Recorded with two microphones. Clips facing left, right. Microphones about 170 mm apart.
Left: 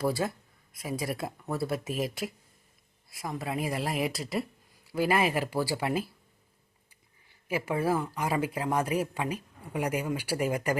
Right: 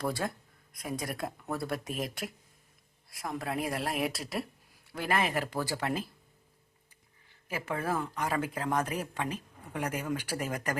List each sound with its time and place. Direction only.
0.0 s speech: 5° left (ahead or behind)
7.4 s speech: 10° left (ahead or behind)